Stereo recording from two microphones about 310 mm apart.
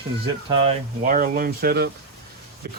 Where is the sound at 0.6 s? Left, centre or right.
Right.